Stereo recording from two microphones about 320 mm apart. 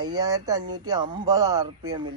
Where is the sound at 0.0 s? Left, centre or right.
Centre.